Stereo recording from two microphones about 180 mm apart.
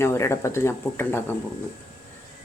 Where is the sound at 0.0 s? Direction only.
15° left (ahead or behind).